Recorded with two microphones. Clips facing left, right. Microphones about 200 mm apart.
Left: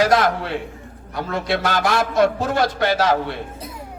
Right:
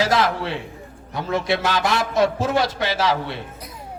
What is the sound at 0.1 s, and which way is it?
Speech, 50° left (ahead or behind).